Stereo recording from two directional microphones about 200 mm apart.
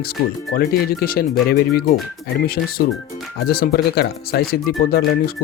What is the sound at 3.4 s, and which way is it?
Speech, 50° left (ahead or behind).